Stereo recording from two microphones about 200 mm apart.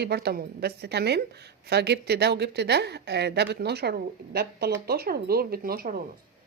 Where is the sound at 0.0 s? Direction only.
55° right (ahead or behind).